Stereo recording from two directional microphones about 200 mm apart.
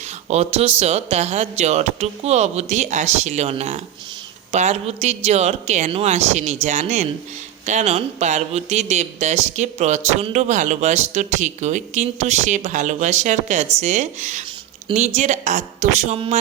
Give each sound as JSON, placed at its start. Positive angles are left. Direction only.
{"t": 0.3, "sound": "speech", "side_deg": -30}